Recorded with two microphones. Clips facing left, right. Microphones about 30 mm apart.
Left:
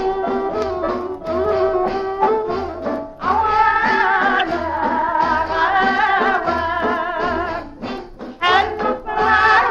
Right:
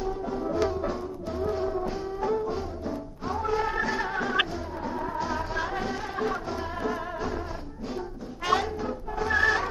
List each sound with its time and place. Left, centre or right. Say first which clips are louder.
0.0 s music: left 11 dB; left